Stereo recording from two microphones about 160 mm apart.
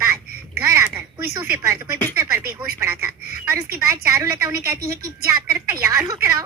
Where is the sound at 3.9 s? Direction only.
20° right (ahead or behind).